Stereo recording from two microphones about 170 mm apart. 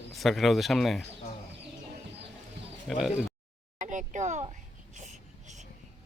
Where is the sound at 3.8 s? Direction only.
50° right (ahead or behind).